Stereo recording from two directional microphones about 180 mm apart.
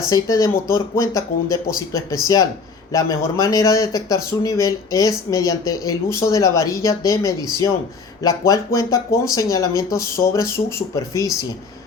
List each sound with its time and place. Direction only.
0.1 s speech: 20° left (ahead or behind)